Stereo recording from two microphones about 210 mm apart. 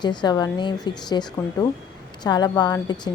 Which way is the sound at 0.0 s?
20° left (ahead or behind).